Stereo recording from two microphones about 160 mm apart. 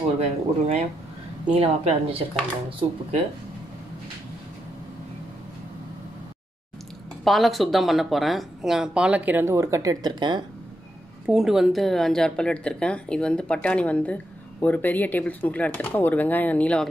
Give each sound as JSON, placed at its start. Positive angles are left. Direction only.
{"t": 0.2, "sound": "a woman's voice", "side_deg": -40}
{"t": 7.2, "sound": "speech", "side_deg": 0}
{"t": 11.2, "sound": "a woman's voice", "side_deg": -5}